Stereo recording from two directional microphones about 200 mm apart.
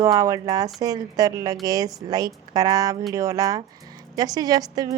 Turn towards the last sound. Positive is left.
turn(degrees=-20)  # may be behind; listen again after turning